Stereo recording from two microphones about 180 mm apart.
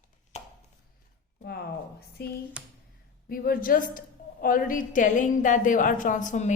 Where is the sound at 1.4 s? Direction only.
60° left (ahead or behind).